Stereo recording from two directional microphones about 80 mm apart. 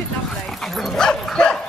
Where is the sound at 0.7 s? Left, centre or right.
Centre.